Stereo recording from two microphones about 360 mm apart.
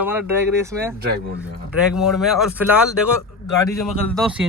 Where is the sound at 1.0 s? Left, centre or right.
Right.